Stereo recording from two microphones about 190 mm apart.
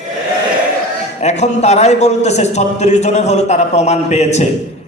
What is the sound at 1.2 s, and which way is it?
A man's voice, 35° left (ahead or behind).